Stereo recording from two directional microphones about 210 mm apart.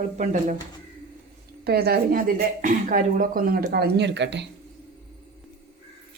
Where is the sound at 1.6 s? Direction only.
50° right (ahead or behind).